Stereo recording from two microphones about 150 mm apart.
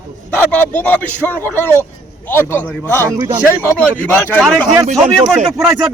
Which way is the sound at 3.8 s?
10° left (ahead or behind).